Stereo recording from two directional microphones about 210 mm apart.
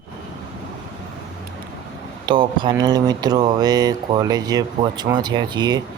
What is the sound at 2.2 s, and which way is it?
Speech, 20° right (ahead or behind).